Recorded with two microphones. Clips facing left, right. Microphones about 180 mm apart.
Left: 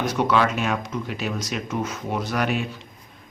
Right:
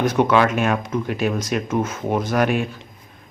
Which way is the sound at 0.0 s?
55° right (ahead or behind).